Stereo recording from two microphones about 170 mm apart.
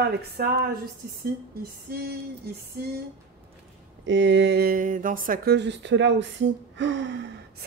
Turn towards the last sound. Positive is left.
turn(degrees=-90)